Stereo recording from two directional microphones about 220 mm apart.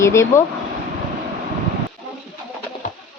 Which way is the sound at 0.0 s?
15° left (ahead or behind).